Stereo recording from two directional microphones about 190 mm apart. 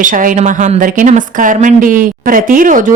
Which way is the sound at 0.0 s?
45° right (ahead or behind).